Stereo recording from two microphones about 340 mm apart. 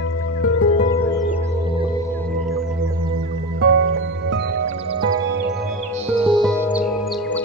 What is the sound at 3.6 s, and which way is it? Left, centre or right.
Music, right.